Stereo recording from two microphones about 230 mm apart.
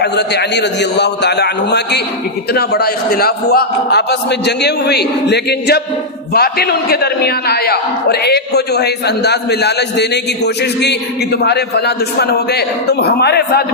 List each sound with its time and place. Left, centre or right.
0.0 s a man's voice: left